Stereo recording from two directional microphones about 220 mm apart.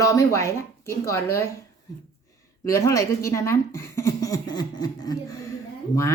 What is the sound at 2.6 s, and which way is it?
Speech, 15° left (ahead or behind).